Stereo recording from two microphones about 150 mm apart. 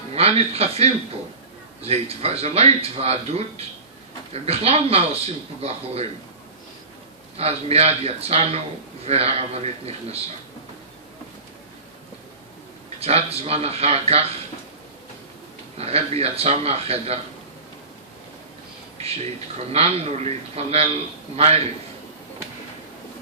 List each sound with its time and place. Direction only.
0.1 s speech: 45° right (ahead or behind)
7.3 s speech: 45° right (ahead or behind)
13.0 s speech: 40° right (ahead or behind)
15.8 s speech: 45° right (ahead or behind)
18.9 s a sound: 45° right (ahead or behind)
19.7 s speech: 45° right (ahead or behind)